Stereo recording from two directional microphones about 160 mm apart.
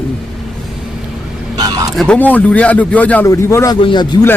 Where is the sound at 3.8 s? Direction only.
30° left (ahead or behind).